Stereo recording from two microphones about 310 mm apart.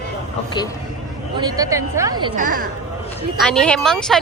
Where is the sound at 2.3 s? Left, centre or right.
Right.